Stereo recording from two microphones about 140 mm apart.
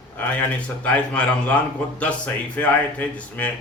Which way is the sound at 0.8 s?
10° left (ahead or behind).